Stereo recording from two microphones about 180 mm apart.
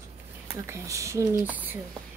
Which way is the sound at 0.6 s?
15° right (ahead or behind).